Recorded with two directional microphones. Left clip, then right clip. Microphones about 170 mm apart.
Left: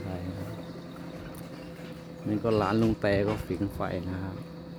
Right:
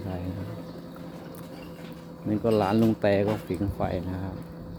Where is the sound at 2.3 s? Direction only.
5° right (ahead or behind).